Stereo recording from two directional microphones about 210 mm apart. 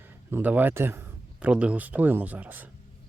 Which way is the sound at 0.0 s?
10° right (ahead or behind).